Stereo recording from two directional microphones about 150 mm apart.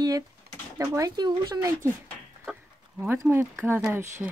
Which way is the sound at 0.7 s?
20° right (ahead or behind).